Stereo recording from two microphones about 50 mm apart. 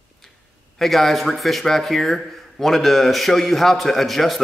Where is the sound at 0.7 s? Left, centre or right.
Centre.